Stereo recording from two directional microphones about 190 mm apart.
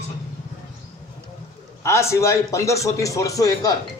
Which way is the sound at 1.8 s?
15° left (ahead or behind).